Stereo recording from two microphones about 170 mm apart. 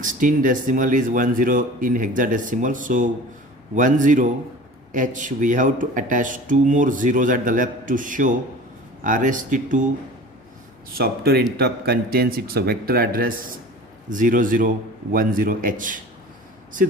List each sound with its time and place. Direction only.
0.0 s speech: 50° right (ahead or behind)
10.9 s speech: 65° right (ahead or behind)